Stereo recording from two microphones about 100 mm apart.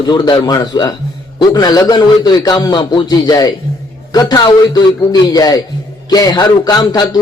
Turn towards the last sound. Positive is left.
turn(degrees=40)  # may be behind; listen again after turning